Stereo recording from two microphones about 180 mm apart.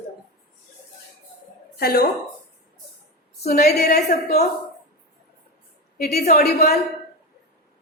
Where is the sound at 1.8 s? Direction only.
55° left (ahead or behind).